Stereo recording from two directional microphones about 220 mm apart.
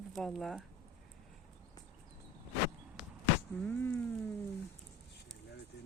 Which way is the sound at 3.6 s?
10° left (ahead or behind).